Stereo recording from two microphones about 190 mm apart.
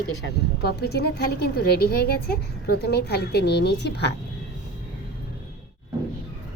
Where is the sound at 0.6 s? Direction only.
55° left (ahead or behind).